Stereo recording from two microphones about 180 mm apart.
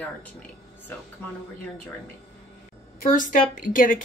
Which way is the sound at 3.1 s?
45° left (ahead or behind).